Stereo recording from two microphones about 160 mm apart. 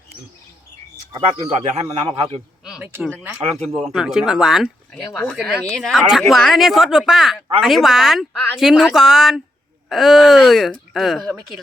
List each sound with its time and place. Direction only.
1.4 s a man's voice: 40° right (ahead or behind)
2.6 s speech: 5° right (ahead or behind)
5.5 s speech: 10° left (ahead or behind)
5.9 s speech: centre (ahead or behind)